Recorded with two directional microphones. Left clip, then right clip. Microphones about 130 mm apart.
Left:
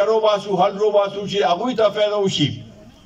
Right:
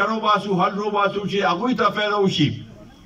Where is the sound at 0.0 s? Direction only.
30° left (ahead or behind).